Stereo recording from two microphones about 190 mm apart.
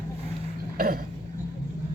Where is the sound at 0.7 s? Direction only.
50° right (ahead or behind).